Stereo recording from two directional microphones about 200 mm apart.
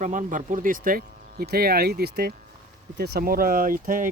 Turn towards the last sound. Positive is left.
turn(degrees=-45)  # may be behind; listen again after turning